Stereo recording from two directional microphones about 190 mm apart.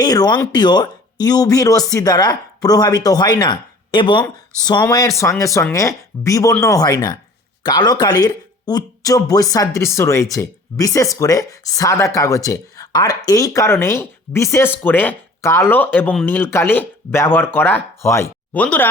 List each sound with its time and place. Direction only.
0.0 s speech: 20° left (ahead or behind)